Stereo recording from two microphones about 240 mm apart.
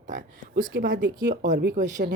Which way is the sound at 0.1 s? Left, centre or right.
Right.